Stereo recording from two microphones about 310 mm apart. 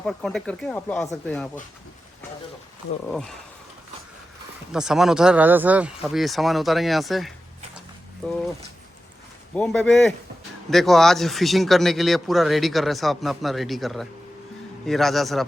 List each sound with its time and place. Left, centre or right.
0.0 s speech: centre
3.1 s speech: centre
4.7 s speech: centre
9.6 s speech: centre